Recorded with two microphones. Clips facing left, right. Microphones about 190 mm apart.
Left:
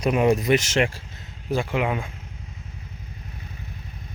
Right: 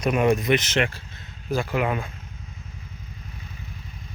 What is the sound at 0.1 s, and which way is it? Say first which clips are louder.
Speech: left 1 dB; 25° left (ahead or behind).